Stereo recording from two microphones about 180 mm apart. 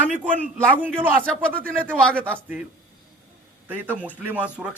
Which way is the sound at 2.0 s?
5° left (ahead or behind).